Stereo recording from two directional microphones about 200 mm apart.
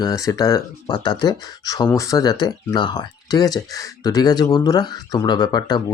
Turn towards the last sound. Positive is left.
turn(degrees=20)  # may be behind; listen again after turning